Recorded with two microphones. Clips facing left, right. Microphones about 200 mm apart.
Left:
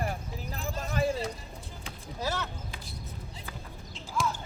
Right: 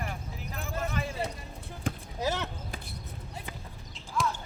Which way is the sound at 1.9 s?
50° right (ahead or behind).